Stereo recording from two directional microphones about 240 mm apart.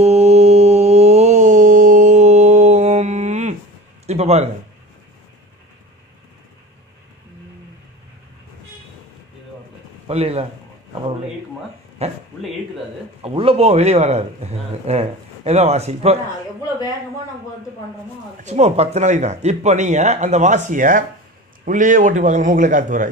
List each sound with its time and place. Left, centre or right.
0.0 s mantra: right
4.0 s a sound: right
10.0 s speech: right
12.0 s a man's voice: right
13.2 s a man's voice: right
18.4 s a man's voice: right